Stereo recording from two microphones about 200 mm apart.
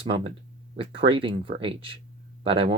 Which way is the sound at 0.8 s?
25° right (ahead or behind).